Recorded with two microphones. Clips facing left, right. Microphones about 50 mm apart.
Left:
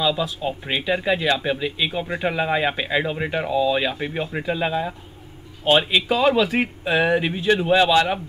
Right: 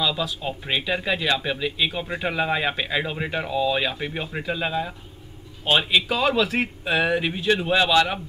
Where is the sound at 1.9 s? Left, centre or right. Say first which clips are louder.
Left 3 dB; centre.